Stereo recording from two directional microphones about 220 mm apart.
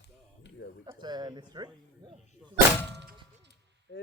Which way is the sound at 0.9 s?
20° right (ahead or behind).